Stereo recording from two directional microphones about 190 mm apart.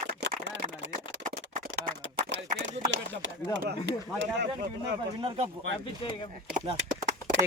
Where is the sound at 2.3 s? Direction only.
75° right (ahead or behind).